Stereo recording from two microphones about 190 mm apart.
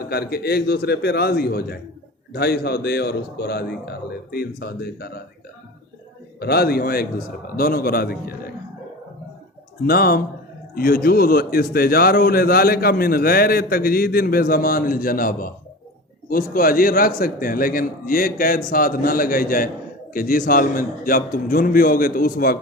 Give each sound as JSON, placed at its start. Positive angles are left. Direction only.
{"t": 0.1, "sound": "a man's voice", "side_deg": 55}
{"t": 6.4, "sound": "a man's voice", "side_deg": 55}
{"t": 9.8, "sound": "a man's voice", "side_deg": 50}